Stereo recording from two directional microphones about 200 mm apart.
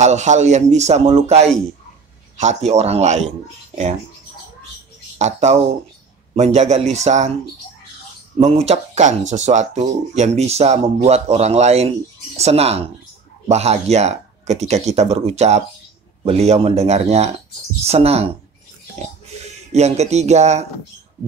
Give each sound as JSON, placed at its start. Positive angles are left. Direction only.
{"t": 0.0, "sound": "speech", "side_deg": -35}
{"t": 5.2, "sound": "speech", "side_deg": -35}
{"t": 8.4, "sound": "speech", "side_deg": -30}
{"t": 19.4, "sound": "speech", "side_deg": -35}